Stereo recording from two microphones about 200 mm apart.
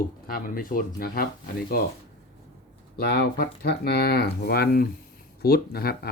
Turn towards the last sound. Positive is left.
turn(degrees=50)  # may be behind; listen again after turning